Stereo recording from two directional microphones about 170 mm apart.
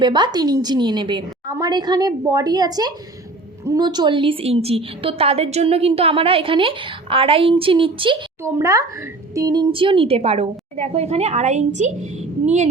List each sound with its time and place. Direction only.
0.0 s a woman's voice: 25° right (ahead or behind)
8.5 s a woman's voice: 20° right (ahead or behind); by 11.9 s 40° right (ahead or behind)